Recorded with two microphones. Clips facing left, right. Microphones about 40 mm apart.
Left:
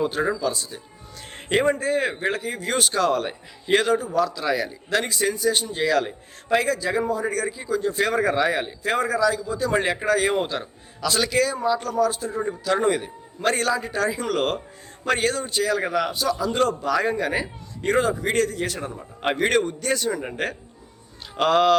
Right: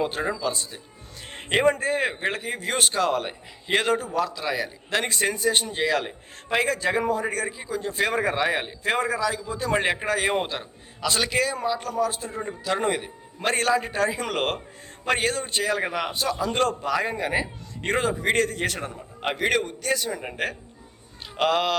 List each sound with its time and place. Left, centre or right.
0.0 s a man's voice: right
1.2 s a sound: centre
1.8 s a man's voice: right
2.9 s a man's voice: centre
5.0 s a man's voice: right
5.7 s a man's voice: centre
13.6 s a man's voice: right
15.0 s a man's voice: centre; by 16.7 s right
16.8 s a man's voice: centre
17.8 s a man's voice: right
18.5 s a man's voice: right
18.9 s a man's voice: centre